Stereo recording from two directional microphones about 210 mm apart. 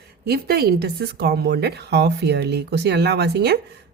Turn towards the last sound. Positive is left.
turn(degrees=-50)  # may be behind; listen again after turning